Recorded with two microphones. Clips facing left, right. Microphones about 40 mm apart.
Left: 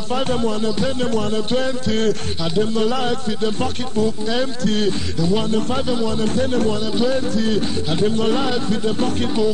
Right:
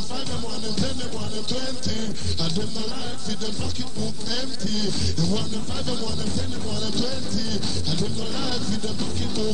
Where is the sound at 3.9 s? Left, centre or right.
Left.